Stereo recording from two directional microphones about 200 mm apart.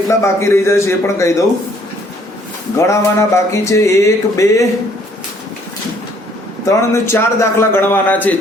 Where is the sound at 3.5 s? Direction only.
15° left (ahead or behind).